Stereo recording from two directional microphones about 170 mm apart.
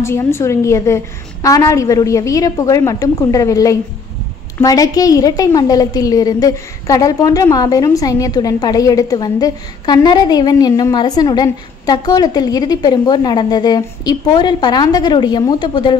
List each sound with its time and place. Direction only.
0.0 s a woman's voice: 15° left (ahead or behind)